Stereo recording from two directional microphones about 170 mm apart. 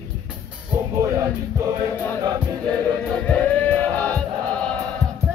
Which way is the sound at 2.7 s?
5° left (ahead or behind).